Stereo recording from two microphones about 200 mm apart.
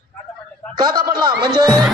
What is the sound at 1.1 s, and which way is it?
Speech, 20° right (ahead or behind).